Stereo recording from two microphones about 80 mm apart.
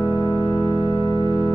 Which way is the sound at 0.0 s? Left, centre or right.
Right.